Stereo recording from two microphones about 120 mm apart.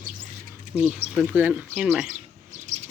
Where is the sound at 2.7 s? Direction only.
75° right (ahead or behind).